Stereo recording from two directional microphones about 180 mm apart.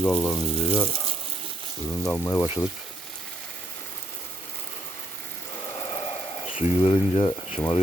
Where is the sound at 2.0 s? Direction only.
15° left (ahead or behind).